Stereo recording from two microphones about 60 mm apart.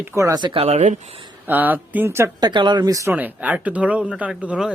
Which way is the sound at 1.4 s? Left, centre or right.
Right.